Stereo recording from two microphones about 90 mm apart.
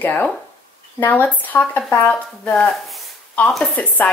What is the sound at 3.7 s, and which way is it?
Speech, 15° left (ahead or behind).